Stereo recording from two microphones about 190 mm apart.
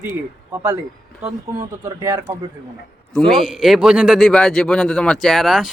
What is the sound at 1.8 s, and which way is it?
Speech, 20° right (ahead or behind).